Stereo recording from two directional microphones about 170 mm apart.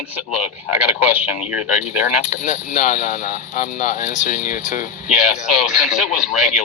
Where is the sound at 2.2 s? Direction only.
45° left (ahead or behind).